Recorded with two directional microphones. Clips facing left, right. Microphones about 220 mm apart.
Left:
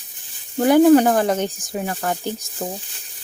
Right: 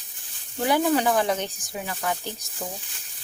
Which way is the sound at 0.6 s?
50° left (ahead or behind).